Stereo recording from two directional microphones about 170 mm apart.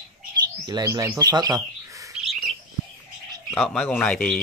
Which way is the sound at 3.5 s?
5° left (ahead or behind).